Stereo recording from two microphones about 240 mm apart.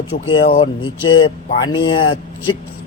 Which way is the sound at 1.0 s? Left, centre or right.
Centre.